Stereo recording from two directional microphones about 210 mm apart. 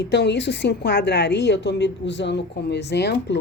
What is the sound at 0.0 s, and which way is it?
A woman's voice, 55° left (ahead or behind).